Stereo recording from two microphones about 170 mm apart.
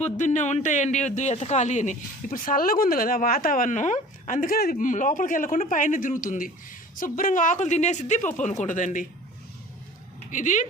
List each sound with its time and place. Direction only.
0.0 s speech: 45° left (ahead or behind)
10.3 s speech: 50° left (ahead or behind)